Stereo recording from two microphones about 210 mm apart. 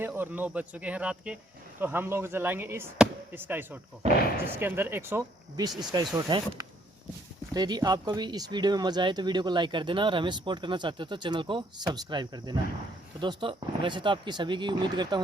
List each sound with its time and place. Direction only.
0.0 s speech: 10° right (ahead or behind)